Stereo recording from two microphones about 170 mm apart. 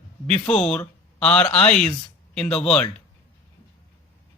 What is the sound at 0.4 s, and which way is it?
Speech, 35° left (ahead or behind).